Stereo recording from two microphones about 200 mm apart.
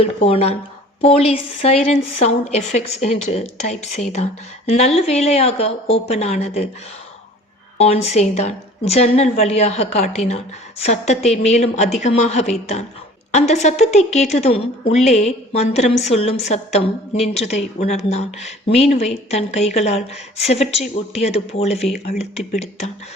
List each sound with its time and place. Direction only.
0.0 s a woman's voice: 30° left (ahead or behind)
7.8 s a woman's voice: 30° left (ahead or behind)